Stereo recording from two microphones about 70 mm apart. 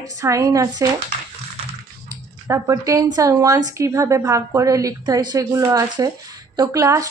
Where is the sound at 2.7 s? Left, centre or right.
Right.